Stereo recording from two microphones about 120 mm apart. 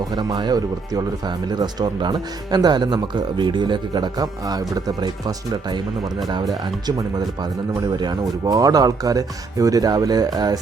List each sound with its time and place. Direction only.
0.0 s speech: 35° right (ahead or behind)
7.8 s speech: 35° right (ahead or behind)